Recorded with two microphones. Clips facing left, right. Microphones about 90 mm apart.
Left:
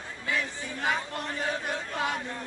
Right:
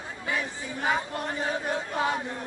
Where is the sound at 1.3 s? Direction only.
15° right (ahead or behind).